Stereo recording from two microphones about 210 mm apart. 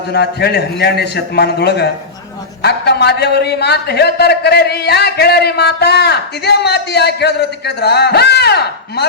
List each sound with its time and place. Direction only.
0.1 s a man's voice: 50° left (ahead or behind)